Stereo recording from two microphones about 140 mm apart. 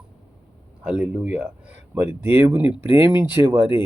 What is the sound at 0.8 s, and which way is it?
Speech, 10° right (ahead or behind).